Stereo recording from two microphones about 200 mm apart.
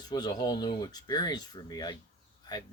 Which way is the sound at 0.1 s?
20° left (ahead or behind).